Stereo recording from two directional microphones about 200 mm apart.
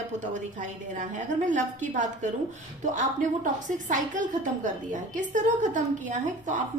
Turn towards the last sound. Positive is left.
turn(degrees=-40)  # may be behind; listen again after turning